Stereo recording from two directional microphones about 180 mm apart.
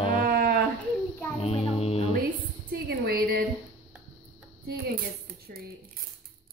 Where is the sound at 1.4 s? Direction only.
35° left (ahead or behind).